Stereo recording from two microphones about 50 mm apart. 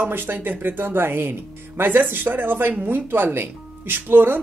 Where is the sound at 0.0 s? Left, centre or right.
Right.